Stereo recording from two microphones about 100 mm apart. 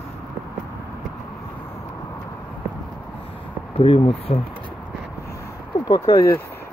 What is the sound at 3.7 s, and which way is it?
Speech, 65° left (ahead or behind).